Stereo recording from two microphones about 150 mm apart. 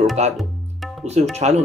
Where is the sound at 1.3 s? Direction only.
45° right (ahead or behind).